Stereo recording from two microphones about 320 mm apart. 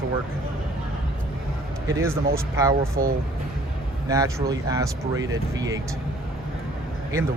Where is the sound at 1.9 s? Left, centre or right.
Centre.